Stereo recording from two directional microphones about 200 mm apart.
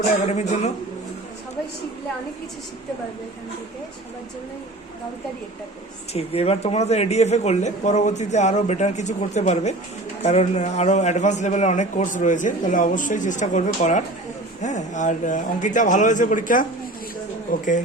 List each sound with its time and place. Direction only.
0.3 s a man's voice: 35° left (ahead or behind)
6.1 s a man's voice: 30° left (ahead or behind)